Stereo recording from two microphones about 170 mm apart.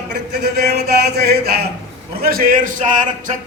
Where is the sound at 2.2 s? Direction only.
60° right (ahead or behind).